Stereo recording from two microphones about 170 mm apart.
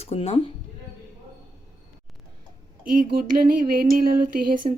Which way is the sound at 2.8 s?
55° right (ahead or behind).